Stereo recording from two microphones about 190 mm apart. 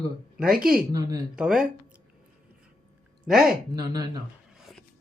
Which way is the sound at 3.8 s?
20° right (ahead or behind).